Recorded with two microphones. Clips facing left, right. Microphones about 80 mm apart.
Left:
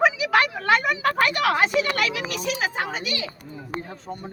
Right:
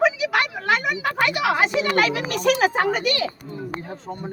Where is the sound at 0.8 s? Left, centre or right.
Centre.